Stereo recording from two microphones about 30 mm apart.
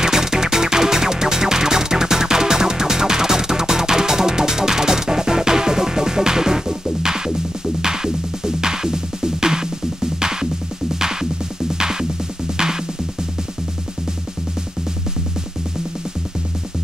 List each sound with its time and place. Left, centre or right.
0.0 s music: centre